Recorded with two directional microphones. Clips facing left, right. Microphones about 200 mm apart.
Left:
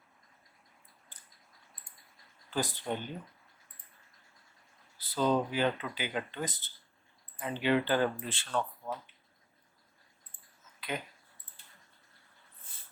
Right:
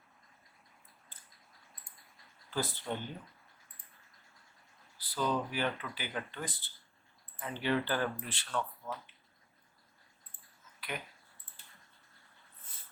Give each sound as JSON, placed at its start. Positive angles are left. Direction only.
{"t": 2.5, "sound": "speech", "side_deg": 15}
{"t": 4.9, "sound": "speech", "side_deg": 25}
{"t": 10.8, "sound": "a sound", "side_deg": 25}